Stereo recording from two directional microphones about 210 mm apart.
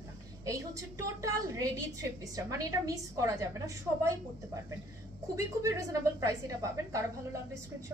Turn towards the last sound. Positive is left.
turn(degrees=-15)  # may be behind; listen again after turning